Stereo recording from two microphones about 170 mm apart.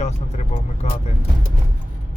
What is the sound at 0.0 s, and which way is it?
Vehicle, 40° left (ahead or behind).